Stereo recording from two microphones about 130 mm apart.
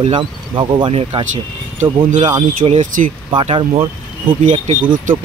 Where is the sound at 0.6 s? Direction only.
40° right (ahead or behind).